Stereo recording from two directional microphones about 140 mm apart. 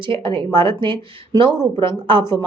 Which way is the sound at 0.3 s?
35° right (ahead or behind).